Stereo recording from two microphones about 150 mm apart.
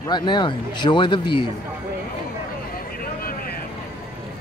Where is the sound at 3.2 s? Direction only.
80° left.